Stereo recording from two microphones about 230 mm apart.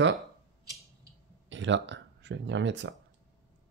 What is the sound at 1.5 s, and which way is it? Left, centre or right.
Speech, right.